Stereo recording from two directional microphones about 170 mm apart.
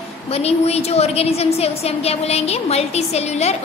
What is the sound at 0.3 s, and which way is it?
A woman's voice, 40° left (ahead or behind).